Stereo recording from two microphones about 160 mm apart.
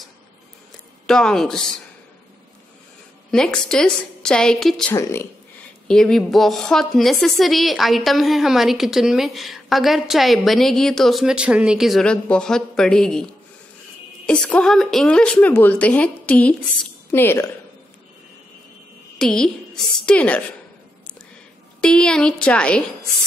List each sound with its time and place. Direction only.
1.0 s a woman's voice: 5° left (ahead or behind)
3.3 s a woman's voice: 5° left (ahead or behind)
4.9 s a woman's voice: 15° left (ahead or behind)
5.9 s a woman's voice: 5° left (ahead or behind)
19.1 s a woman's voice: 5° left (ahead or behind)
21.8 s a woman's voice: 5° left (ahead or behind)